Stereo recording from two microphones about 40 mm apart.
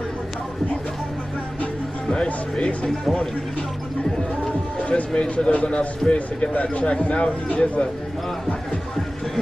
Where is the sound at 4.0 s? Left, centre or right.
Centre.